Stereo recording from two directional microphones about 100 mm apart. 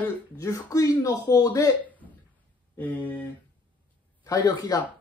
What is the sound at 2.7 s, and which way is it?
Speech, 15° left (ahead or behind).